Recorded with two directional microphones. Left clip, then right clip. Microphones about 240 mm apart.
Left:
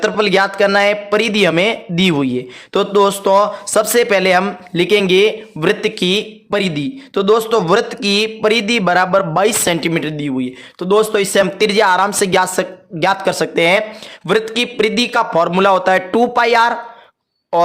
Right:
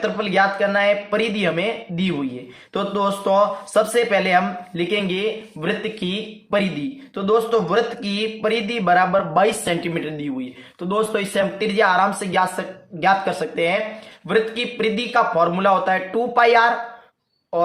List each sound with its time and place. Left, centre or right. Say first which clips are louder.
0.0 s a man's voice: left 5 dB; left